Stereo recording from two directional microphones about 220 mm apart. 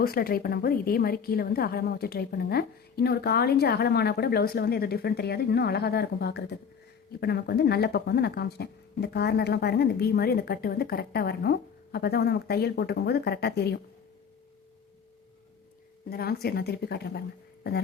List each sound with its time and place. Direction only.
0.0 s speech: 45° left (ahead or behind)
16.0 s speech: 45° left (ahead or behind)